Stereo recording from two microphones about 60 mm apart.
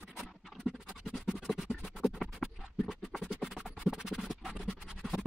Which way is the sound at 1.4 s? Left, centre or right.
Centre.